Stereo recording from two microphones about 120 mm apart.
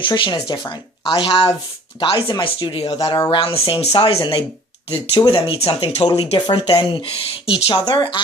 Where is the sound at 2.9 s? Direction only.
30° left (ahead or behind).